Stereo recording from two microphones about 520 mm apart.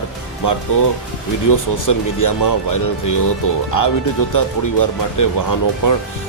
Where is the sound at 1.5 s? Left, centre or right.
Left.